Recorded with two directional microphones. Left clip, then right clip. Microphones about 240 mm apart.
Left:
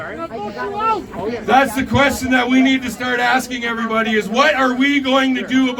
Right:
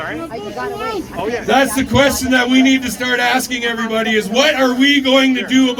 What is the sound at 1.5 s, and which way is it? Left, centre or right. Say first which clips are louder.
Speech: even; centre.